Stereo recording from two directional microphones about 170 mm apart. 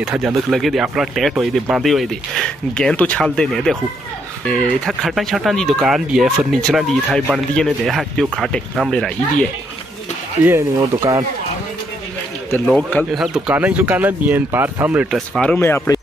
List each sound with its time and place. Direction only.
0.0 s speech: centre (ahead or behind)
10.4 s speech: 15° right (ahead or behind)
12.6 s speech: 5° left (ahead or behind)